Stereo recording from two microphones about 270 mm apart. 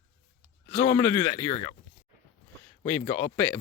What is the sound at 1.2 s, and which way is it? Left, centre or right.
Speech, centre.